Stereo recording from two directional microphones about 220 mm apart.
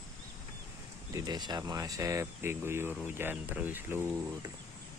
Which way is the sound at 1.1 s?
20° right (ahead or behind).